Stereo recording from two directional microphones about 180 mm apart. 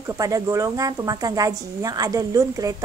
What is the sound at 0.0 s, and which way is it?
A woman's voice, 20° right (ahead or behind).